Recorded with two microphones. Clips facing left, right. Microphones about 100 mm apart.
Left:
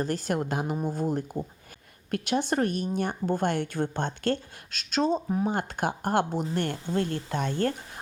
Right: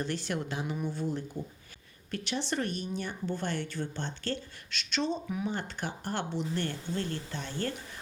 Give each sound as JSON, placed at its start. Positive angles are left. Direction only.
{"t": 0.0, "sound": "speech", "side_deg": 45}